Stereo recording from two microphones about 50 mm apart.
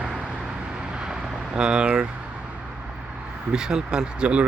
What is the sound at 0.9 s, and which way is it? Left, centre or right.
Vehicle, centre.